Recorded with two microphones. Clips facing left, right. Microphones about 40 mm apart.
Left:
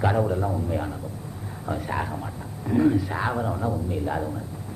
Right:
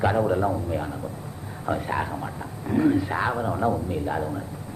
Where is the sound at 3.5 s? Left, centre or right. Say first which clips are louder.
Right 4 dB; right.